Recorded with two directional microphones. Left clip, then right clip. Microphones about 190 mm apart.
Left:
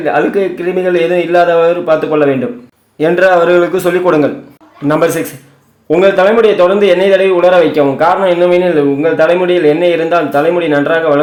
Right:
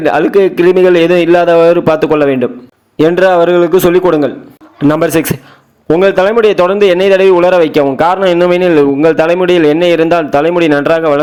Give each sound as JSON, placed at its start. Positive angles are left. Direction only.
{"t": 0.0, "sound": "a man's voice", "side_deg": -35}